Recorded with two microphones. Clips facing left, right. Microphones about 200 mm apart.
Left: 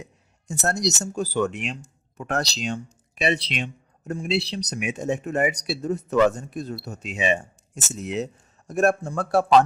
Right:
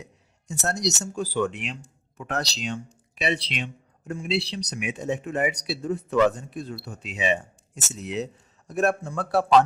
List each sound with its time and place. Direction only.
0.0 s speech: 50° left (ahead or behind)